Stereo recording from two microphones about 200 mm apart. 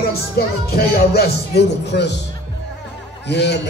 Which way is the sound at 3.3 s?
60° left (ahead or behind).